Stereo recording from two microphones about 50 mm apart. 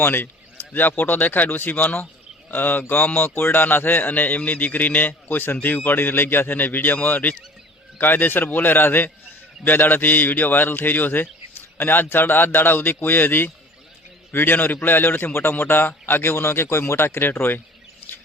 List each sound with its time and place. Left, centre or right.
0.0 s a man's voice: left
0.7 s a man's voice: left